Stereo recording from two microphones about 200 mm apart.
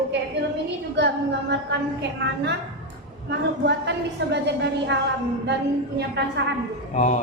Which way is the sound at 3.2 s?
60° right (ahead or behind).